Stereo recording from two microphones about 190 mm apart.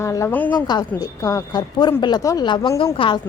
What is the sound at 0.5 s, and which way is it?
A woman's voice, 20° left (ahead or behind).